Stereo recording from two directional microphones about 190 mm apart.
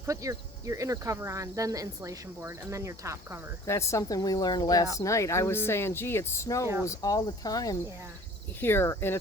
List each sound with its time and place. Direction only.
0.0 s speech: 15° right (ahead or behind)
3.7 s speech: 15° left (ahead or behind)